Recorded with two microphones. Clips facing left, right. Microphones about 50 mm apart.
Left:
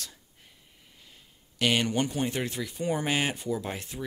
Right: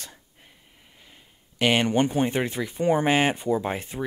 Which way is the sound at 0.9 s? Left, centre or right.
Right.